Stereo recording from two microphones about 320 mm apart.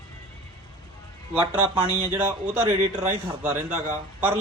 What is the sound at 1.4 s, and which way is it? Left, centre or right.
A man's voice, centre.